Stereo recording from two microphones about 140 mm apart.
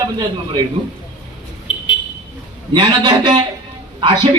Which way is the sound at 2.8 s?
35° right (ahead or behind).